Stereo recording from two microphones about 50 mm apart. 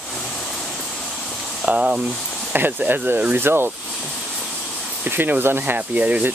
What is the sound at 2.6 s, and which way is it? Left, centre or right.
Speech, right.